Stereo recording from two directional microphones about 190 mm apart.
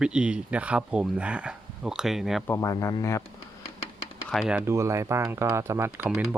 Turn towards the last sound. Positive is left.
turn(degrees=-5)  # may be behind; listen again after turning